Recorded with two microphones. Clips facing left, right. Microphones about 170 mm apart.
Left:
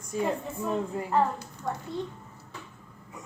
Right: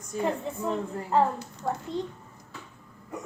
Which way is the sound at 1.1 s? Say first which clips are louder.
Right 3 dB; 20° right (ahead or behind).